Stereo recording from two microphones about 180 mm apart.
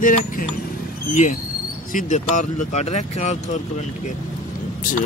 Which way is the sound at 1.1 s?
40° left (ahead or behind).